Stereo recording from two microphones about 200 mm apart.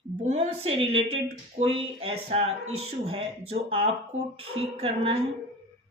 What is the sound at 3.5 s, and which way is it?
A woman's voice, 30° right (ahead or behind).